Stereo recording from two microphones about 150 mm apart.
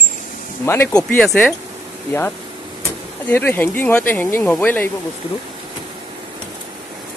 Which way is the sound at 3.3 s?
15° left (ahead or behind).